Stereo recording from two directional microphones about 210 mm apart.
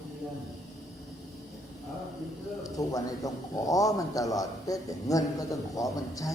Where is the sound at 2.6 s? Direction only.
15° left (ahead or behind).